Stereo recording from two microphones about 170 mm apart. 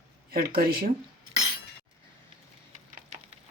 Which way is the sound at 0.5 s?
60° right (ahead or behind).